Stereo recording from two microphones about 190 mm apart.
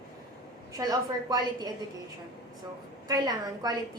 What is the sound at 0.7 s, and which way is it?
A woman's voice, 20° right (ahead or behind).